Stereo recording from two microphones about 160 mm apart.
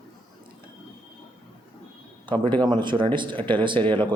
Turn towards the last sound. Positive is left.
turn(degrees=-30)  # may be behind; listen again after turning